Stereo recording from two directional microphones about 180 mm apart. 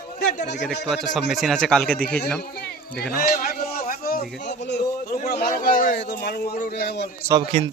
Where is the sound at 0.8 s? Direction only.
Centre (ahead or behind).